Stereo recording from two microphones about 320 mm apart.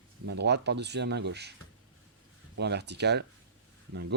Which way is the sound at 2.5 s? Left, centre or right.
Right.